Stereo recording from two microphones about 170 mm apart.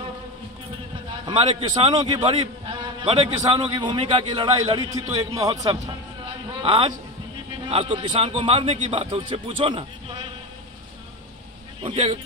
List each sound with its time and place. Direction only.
1.7 s a man's voice: 25° right (ahead or behind)
11.8 s speech: 30° right (ahead or behind)